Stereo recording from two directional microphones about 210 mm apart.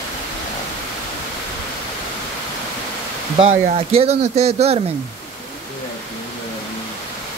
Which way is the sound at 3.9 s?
30° right (ahead or behind).